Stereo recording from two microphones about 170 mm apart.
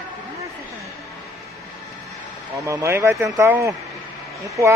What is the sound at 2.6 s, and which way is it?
Speech, 15° right (ahead or behind).